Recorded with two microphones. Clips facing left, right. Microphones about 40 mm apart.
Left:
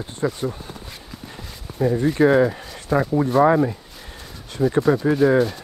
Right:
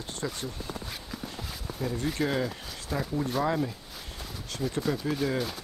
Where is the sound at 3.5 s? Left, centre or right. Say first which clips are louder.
Left 11 dB; left.